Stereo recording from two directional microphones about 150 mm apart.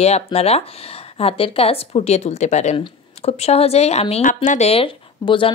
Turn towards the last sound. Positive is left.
turn(degrees=35)  # may be behind; listen again after turning